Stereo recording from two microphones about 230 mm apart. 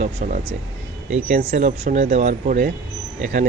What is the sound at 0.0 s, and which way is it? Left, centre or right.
Speech, right.